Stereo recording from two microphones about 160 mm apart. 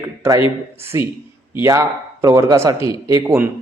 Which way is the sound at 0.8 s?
15° right (ahead or behind).